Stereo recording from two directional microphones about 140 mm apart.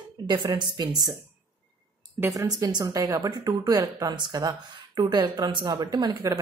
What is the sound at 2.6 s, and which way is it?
Speech, 25° right (ahead or behind).